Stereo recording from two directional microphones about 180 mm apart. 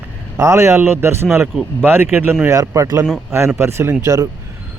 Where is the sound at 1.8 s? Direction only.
10° right (ahead or behind).